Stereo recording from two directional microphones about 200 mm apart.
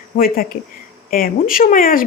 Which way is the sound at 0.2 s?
45° left (ahead or behind).